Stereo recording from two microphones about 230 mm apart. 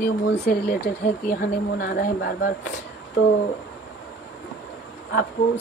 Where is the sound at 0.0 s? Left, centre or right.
Left.